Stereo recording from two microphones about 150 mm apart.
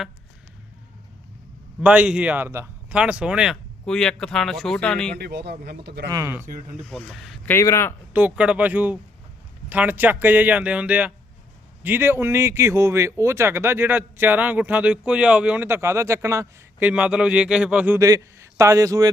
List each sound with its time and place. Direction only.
1.8 s speech: 10° right (ahead or behind)
5.1 s speech: 90° right
6.1 s speech: 25° right (ahead or behind)
6.8 s speech: centre (ahead or behind)
7.4 s speech: 15° left (ahead or behind)
8.1 s speech: 10° right (ahead or behind)
16.8 s speech: 10° right (ahead or behind)
18.0 s a man's voice: 20° right (ahead or behind)